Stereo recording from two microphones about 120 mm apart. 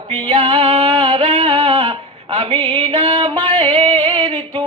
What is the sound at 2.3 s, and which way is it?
Music, 55° right (ahead or behind).